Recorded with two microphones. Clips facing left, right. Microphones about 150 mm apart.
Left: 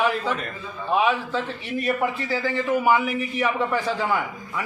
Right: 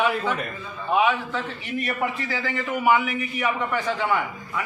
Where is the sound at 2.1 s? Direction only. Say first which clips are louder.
Left 3 dB; 30° left (ahead or behind).